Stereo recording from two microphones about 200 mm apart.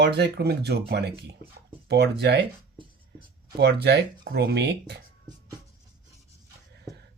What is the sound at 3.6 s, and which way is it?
Speech, 55° right (ahead or behind).